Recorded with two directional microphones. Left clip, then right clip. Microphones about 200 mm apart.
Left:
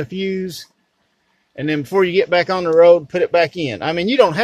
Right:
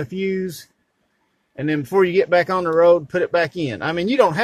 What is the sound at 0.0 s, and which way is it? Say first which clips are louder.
Speech: left 1 dB; 5° left (ahead or behind).